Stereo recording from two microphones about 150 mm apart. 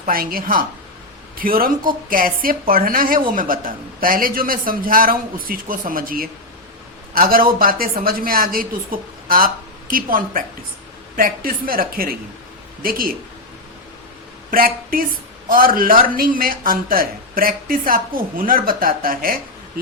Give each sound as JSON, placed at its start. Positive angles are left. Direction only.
{"t": 0.1, "sound": "a man's voice", "side_deg": -75}
{"t": 14.5, "sound": "a man's voice", "side_deg": -70}